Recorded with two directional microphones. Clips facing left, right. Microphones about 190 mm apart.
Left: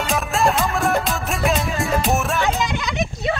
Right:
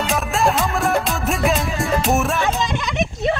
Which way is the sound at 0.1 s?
Centre (ahead or behind).